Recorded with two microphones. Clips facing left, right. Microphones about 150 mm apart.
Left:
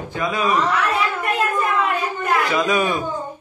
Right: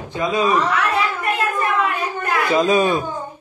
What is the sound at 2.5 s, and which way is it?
Speech, 30° right (ahead or behind).